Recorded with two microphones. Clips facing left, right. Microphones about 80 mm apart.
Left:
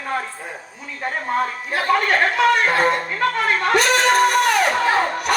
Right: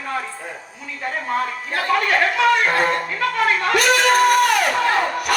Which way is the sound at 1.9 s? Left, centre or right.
Left.